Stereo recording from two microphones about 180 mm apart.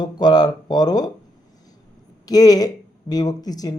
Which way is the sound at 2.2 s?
20° left (ahead or behind).